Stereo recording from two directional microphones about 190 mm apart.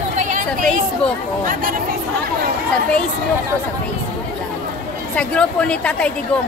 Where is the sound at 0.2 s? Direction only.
45° right (ahead or behind).